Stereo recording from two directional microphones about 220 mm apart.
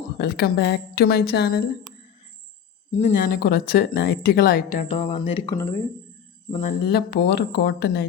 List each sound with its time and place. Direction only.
0.2 s speech: 45° left (ahead or behind)
2.9 s speech: 35° left (ahead or behind)